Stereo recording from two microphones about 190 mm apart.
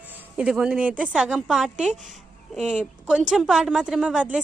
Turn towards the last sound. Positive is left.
turn(degrees=-5)  # may be behind; listen again after turning